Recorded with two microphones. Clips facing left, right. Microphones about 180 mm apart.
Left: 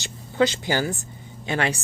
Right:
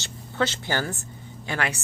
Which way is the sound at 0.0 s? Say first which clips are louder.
Left 5 dB; 15° left (ahead or behind).